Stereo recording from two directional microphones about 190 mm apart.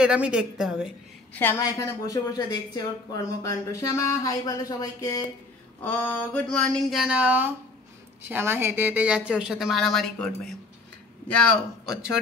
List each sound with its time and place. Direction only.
0.0 s speech: 5° right (ahead or behind)
1.3 s a woman's voice: 10° left (ahead or behind)